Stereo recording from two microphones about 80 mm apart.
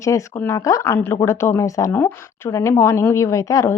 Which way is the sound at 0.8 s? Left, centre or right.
Left.